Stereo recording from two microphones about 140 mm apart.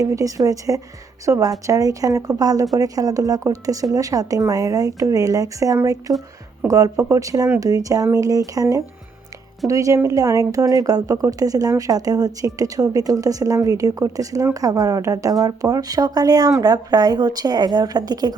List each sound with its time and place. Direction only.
0.0 s speech: 25° right (ahead or behind)